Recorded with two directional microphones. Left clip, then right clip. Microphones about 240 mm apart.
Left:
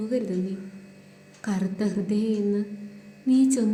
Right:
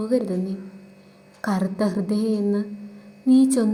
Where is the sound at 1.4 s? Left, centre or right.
Centre.